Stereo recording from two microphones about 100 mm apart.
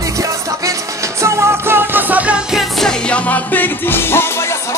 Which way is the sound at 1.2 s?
25° right (ahead or behind).